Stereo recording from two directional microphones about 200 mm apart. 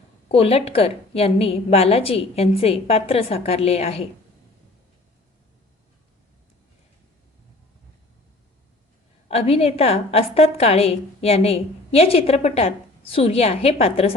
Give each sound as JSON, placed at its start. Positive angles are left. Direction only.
{"t": 0.3, "sound": "a woman's voice", "side_deg": 30}
{"t": 9.3, "sound": "a woman's voice", "side_deg": 30}